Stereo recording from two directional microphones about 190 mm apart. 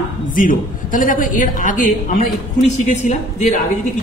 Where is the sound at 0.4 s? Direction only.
45° left (ahead or behind).